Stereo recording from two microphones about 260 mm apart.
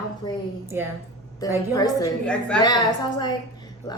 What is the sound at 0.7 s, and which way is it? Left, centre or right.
Speech, centre.